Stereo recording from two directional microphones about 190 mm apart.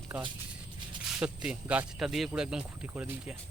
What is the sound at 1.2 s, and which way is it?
Speech, 5° right (ahead or behind).